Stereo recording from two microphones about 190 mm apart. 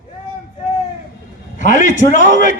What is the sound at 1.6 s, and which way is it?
Speech, 40° left (ahead or behind).